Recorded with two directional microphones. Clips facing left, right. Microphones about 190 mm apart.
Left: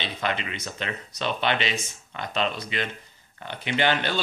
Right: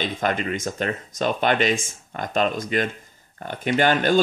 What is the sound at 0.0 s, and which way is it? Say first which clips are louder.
Speech: right 5 dB; 45° right (ahead or behind).